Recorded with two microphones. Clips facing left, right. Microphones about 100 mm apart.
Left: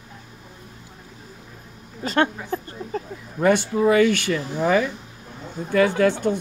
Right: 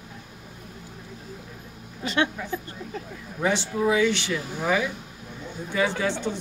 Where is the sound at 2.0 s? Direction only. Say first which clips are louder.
Left 4 dB; 40° left (ahead or behind).